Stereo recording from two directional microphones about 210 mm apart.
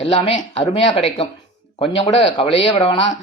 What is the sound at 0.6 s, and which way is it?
Speech, 30° left (ahead or behind).